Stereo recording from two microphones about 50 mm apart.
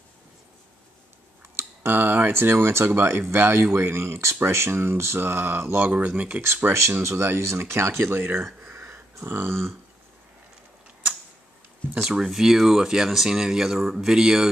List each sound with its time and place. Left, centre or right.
1.9 s speech: right
2.3 s speech: right
5.8 s speech: right
6.4 s speech: right
8.2 s speech: right
8.7 s a sound: right
12.0 s speech: centre